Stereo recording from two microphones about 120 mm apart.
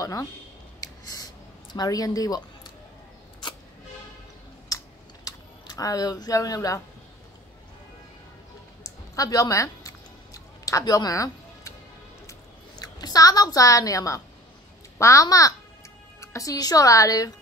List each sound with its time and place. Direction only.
0.0 s speech: 30° left (ahead or behind)
1.0 s a sound: 30° left (ahead or behind)
4.6 s typing: 30° left (ahead or behind)
9.1 s chewing: 30° left (ahead or behind)
12.3 s a sound: 30° left (ahead or behind)
15.0 s a woman's voice: 25° left (ahead or behind)